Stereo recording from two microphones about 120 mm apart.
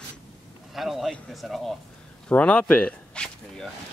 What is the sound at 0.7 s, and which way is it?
A man's voice, centre (ahead or behind).